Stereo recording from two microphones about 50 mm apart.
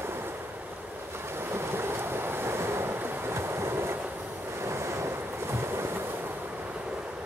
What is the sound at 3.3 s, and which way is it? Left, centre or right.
Train, right.